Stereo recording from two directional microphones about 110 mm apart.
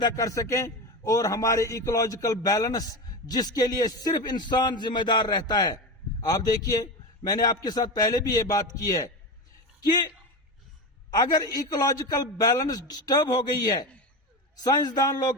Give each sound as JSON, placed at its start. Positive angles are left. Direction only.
{"t": 0.0, "sound": "a man's voice", "side_deg": 30}
{"t": 11.1, "sound": "a man's voice", "side_deg": 40}